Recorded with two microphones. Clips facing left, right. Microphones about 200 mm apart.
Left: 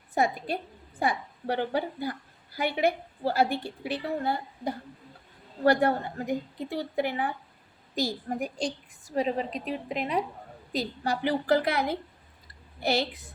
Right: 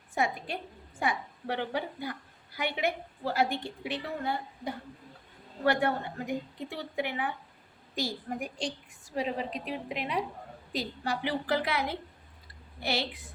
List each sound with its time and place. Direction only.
0.1 s a woman's voice: 35° left (ahead or behind)